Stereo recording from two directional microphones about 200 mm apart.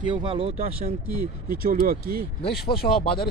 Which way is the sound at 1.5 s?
45° right (ahead or behind).